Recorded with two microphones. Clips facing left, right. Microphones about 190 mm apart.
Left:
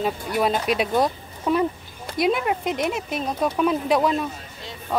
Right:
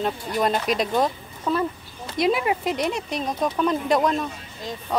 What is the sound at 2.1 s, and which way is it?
Speech, centre (ahead or behind).